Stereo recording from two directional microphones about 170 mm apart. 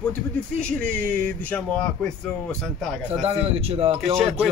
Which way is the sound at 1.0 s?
55° right (ahead or behind).